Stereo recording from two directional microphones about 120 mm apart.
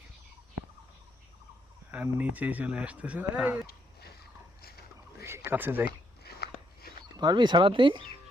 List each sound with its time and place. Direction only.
1.9 s speech: 15° right (ahead or behind)
5.2 s a sound: 20° right (ahead or behind)
7.2 s speech: 40° right (ahead or behind)